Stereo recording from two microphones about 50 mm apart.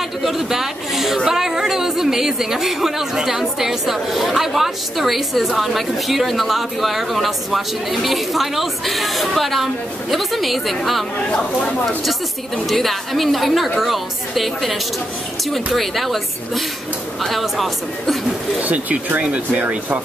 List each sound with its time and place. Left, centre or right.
0.2 s a woman's voice: centre
11.3 s speech: centre
12.6 s a woman's voice: centre
18.6 s speech: right